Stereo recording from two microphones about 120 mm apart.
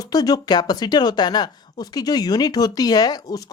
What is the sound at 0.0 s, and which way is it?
Speech, 30° left (ahead or behind).